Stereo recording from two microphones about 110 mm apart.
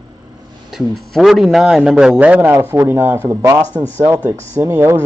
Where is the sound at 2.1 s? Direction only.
15° right (ahead or behind).